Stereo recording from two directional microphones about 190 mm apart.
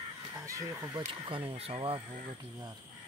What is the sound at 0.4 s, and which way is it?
Speech, 15° right (ahead or behind).